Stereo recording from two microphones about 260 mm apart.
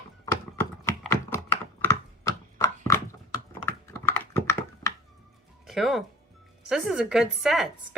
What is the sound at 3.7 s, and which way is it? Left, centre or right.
Computer keyboard, centre.